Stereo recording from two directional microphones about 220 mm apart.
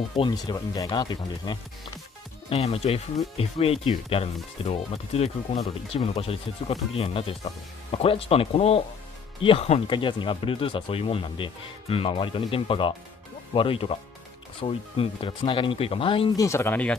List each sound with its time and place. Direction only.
0.1 s speech: 20° left (ahead or behind)